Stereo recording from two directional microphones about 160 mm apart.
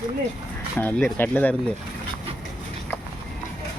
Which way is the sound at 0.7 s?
10° left (ahead or behind).